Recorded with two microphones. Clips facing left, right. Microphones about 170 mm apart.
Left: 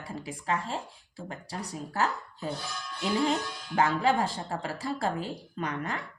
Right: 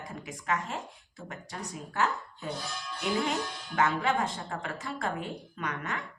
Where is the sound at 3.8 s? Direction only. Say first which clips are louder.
Left 2 dB; 35° left (ahead or behind).